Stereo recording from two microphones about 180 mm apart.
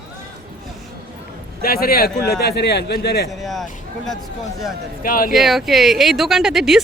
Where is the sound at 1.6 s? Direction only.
55° left (ahead or behind).